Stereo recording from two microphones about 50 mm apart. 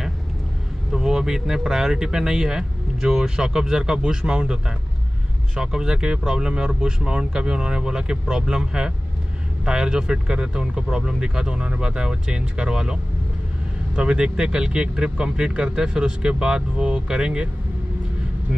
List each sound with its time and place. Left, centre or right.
0.9 s speech: centre